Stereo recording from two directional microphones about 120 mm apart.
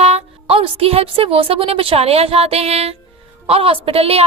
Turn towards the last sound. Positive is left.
turn(degrees=-55)  # may be behind; listen again after turning